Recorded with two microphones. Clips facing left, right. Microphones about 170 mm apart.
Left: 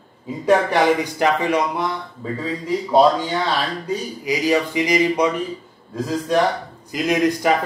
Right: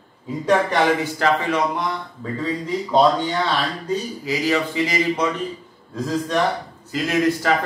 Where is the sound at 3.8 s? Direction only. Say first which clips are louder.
Even; 15° left (ahead or behind).